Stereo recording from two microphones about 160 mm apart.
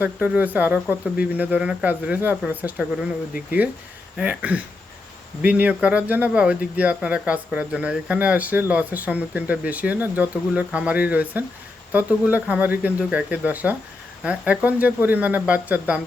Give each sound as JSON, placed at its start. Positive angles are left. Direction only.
{"t": 0.0, "sound": "speech", "side_deg": -10}